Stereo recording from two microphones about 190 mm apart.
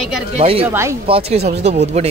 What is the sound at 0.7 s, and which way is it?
Speech, 15° right (ahead or behind).